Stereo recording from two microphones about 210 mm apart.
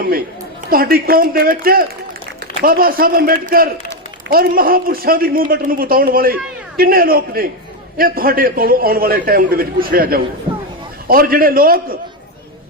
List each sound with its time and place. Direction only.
0.7 s a man's voice: 45° right (ahead or behind)